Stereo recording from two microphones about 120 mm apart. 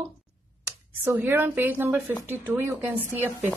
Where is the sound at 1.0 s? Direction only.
15° right (ahead or behind).